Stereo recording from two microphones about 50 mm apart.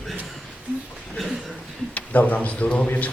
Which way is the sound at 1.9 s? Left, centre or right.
Left.